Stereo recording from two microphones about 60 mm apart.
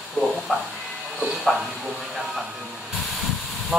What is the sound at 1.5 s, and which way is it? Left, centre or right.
Speech, centre.